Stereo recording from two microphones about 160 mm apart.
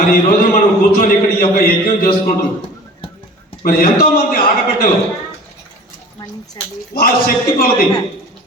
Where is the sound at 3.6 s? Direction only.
65° left (ahead or behind).